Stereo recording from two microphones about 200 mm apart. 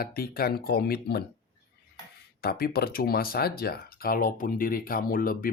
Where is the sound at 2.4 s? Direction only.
50° left (ahead or behind).